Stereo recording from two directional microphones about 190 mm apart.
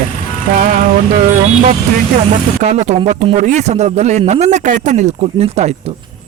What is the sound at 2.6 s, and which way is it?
Speech, 35° right (ahead or behind).